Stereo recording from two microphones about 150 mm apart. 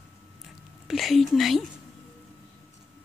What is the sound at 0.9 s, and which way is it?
Whispering, centre (ahead or behind).